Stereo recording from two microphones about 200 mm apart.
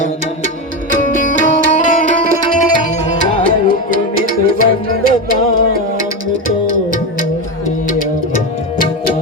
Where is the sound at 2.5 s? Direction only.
40° left (ahead or behind).